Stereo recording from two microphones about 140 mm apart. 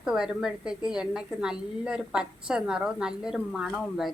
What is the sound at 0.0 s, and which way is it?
A woman's voice, 5° right (ahead or behind).